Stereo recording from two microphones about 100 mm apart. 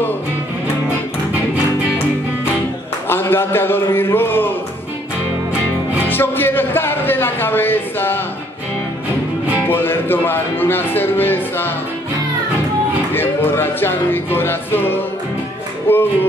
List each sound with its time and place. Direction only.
3.1 s a man's voice: 25° left (ahead or behind)
6.0 s a man's voice: 20° left (ahead or behind)
9.7 s a man's voice: 20° left (ahead or behind)
13.1 s a man's voice: 20° left (ahead or behind)
15.9 s music: 20° left (ahead or behind)